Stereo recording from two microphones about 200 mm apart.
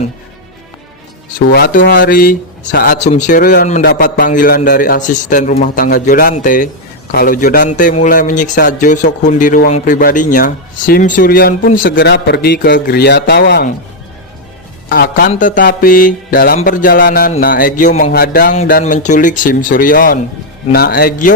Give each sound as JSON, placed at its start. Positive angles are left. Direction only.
{"t": 1.4, "sound": "a man's voice", "side_deg": 45}
{"t": 14.8, "sound": "speech", "side_deg": 55}
{"t": 15.3, "sound": "a man's voice", "side_deg": 40}
{"t": 18.7, "sound": "a man's voice", "side_deg": 35}